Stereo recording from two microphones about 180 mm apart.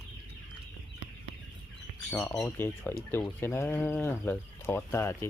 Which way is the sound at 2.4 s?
15° left (ahead or behind).